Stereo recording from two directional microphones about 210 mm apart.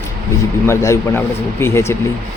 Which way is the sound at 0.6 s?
15° left (ahead or behind).